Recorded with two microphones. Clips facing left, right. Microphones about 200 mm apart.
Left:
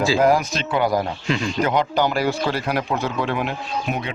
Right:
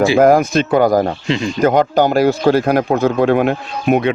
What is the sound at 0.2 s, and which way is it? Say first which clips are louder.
Speech: right 7 dB; 50° right (ahead or behind).